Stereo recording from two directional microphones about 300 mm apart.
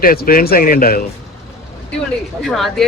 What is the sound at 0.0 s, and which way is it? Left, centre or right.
Speech, left.